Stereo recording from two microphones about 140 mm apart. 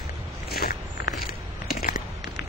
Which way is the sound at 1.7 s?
90° left.